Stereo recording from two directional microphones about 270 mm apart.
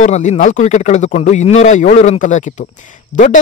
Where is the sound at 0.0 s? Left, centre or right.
Left.